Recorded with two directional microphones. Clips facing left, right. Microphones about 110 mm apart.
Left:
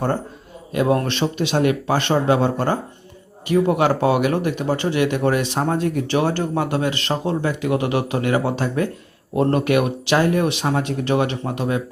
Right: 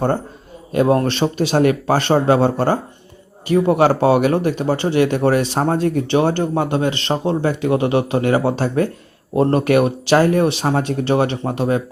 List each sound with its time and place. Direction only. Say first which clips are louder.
0.7 s speech: right 4 dB; 35° right (ahead or behind)